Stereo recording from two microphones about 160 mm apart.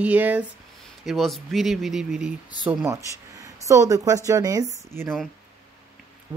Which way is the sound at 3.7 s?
20° right (ahead or behind).